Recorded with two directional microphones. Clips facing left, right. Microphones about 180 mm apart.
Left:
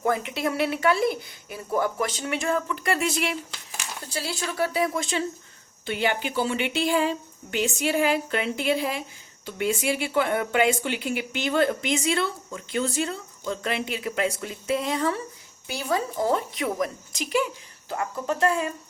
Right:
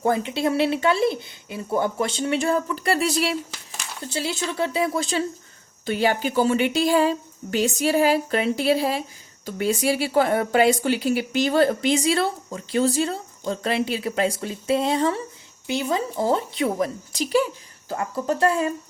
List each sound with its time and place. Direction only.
0.0 s speech: 30° right (ahead or behind)
4.1 s speech: 25° right (ahead or behind)